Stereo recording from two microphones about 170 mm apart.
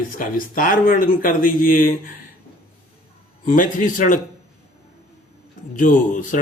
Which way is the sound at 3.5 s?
50° left (ahead or behind).